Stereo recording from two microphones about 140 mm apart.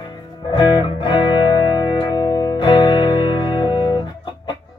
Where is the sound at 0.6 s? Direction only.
35° left (ahead or behind).